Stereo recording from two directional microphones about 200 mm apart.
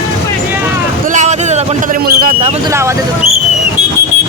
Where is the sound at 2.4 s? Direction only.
30° right (ahead or behind).